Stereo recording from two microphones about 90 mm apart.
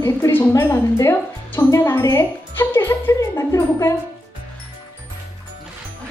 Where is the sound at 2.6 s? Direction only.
25° left (ahead or behind).